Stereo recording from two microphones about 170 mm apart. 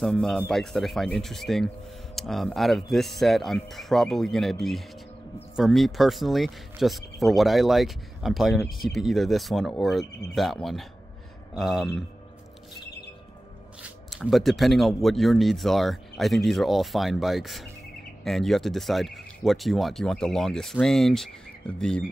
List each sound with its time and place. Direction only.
0.0 s speech: 5° left (ahead or behind)
13.8 s speech: centre (ahead or behind)